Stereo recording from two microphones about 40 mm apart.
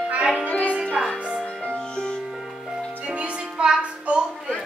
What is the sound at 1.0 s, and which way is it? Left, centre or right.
Music, right.